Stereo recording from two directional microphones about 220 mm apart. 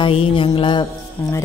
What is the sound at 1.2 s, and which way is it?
Speech, 10° left (ahead or behind).